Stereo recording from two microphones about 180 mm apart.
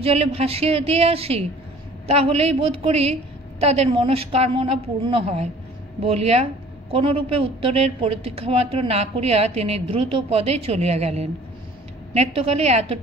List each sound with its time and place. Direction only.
0.0 s a woman's voice: 35° right (ahead or behind)